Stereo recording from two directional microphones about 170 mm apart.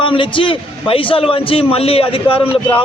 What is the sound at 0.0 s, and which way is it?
A man's voice, 30° left (ahead or behind).